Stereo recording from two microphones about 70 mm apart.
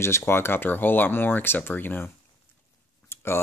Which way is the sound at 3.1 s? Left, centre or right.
Left.